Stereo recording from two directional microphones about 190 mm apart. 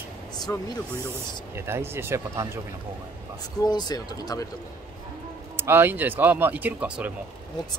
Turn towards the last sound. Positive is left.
turn(degrees=-10)  # may be behind; listen again after turning